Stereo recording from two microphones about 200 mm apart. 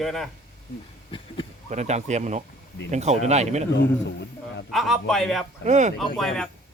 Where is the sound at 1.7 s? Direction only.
35° right (ahead or behind).